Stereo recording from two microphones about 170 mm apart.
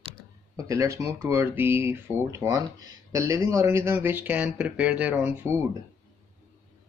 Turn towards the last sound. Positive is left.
turn(degrees=-10)  # may be behind; listen again after turning